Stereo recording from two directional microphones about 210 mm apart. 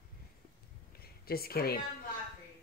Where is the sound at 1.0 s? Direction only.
45° left (ahead or behind).